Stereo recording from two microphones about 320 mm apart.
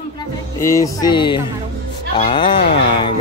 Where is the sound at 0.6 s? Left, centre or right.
Centre.